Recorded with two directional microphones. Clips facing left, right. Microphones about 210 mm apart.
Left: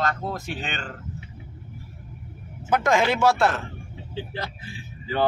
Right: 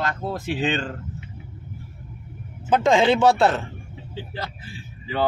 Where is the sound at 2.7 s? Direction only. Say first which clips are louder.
Right 4 dB; 25° right (ahead or behind).